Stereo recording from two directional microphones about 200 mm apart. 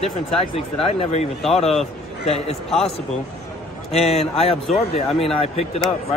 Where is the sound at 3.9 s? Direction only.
30° left (ahead or behind).